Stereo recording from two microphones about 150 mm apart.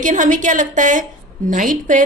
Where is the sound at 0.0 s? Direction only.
60° right (ahead or behind).